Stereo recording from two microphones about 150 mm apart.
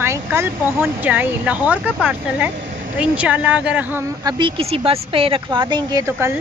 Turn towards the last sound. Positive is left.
turn(degrees=-20)  # may be behind; listen again after turning